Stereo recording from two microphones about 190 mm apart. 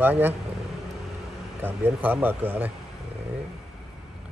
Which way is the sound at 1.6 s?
10° right (ahead or behind).